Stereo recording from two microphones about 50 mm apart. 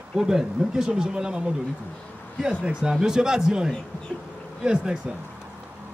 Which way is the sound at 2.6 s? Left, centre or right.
Centre.